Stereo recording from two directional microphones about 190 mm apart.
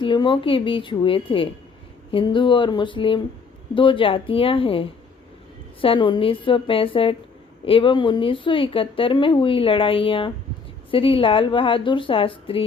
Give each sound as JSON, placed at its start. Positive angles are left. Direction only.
{"t": 0.0, "sound": "speech", "side_deg": 25}